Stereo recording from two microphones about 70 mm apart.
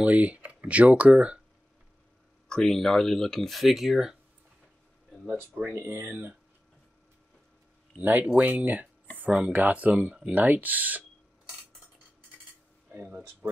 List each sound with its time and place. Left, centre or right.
0.0 s speech: centre
2.5 s speech: centre
5.6 s speech: right
8.0 s speech: right